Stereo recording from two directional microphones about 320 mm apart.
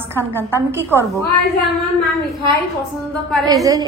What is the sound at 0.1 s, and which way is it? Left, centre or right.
Speech, centre.